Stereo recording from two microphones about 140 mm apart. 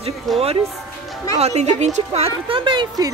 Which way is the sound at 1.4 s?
55° right (ahead or behind).